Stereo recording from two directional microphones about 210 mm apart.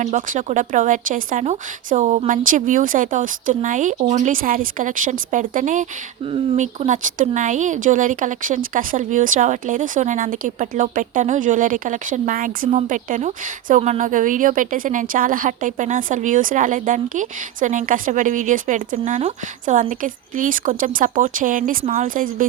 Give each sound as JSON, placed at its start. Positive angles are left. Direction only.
{"t": 0.0, "sound": "speech", "side_deg": -35}